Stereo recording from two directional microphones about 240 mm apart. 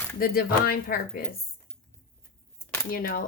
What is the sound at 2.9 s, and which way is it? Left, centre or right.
Speech, left.